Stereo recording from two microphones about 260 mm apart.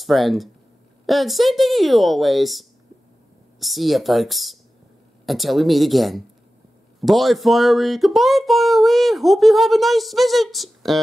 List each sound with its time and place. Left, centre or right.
0.0 s speech: centre